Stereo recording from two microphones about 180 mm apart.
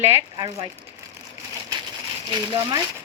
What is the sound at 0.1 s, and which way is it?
Speech, 25° right (ahead or behind).